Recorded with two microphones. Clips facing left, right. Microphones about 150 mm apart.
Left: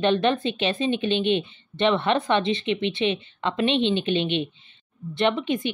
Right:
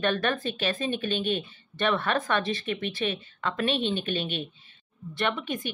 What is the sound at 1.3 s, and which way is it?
Speech, 20° left (ahead or behind).